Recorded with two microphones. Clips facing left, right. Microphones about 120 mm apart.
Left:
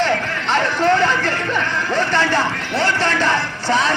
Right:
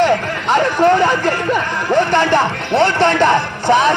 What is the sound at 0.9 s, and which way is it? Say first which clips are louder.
Speech: right 2 dB; 15° right (ahead or behind).